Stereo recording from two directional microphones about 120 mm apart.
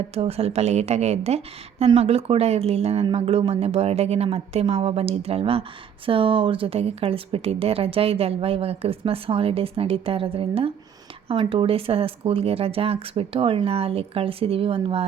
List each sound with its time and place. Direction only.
0.1 s speech: 55° right (ahead or behind)